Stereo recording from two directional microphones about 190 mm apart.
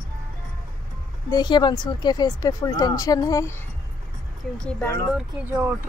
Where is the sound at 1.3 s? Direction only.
20° left (ahead or behind).